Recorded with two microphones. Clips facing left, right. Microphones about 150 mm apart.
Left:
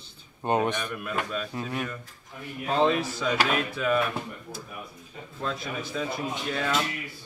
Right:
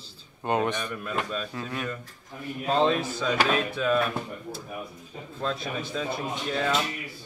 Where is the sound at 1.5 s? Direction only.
20° left (ahead or behind).